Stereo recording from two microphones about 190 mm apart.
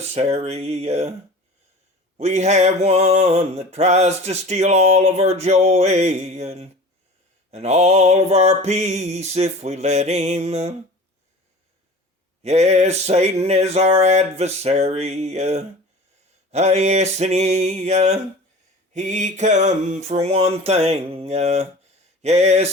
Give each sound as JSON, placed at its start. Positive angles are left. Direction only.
{"t": 0.1, "sound": "mantra", "side_deg": -35}
{"t": 2.1, "sound": "mantra", "side_deg": -35}
{"t": 12.4, "sound": "mantra", "side_deg": -35}